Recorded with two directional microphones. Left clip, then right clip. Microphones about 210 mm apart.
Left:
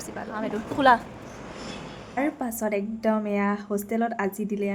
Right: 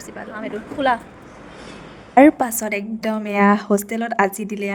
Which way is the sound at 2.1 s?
45° right (ahead or behind).